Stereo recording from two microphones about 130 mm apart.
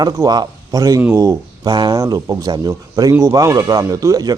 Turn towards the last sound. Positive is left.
turn(degrees=-30)  # may be behind; listen again after turning